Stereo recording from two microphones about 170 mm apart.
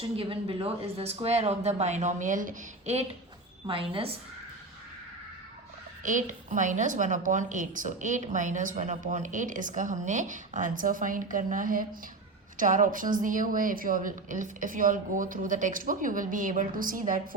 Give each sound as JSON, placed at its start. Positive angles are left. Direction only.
{"t": 0.2, "sound": "speech", "side_deg": -35}
{"t": 6.0, "sound": "a woman's voice", "side_deg": -50}